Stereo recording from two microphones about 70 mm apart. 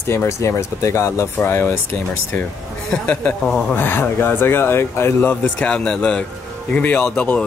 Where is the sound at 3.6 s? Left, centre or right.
Left.